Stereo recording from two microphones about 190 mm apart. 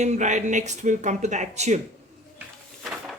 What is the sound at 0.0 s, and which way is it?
Speech, 40° right (ahead or behind).